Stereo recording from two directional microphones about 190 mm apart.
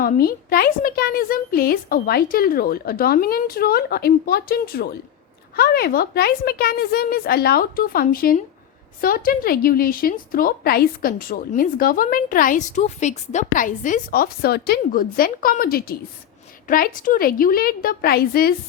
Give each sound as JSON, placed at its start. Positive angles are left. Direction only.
{"t": 0.0, "sound": "a woman's voice", "side_deg": 50}